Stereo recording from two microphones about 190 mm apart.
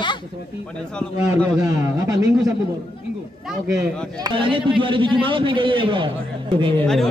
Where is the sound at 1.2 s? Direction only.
20° right (ahead or behind).